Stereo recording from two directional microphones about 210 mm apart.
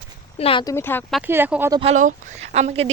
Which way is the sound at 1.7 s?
30° right (ahead or behind).